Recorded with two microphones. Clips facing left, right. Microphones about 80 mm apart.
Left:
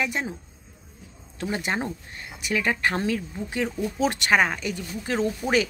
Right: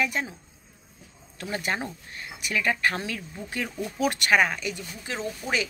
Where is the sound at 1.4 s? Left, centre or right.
Left.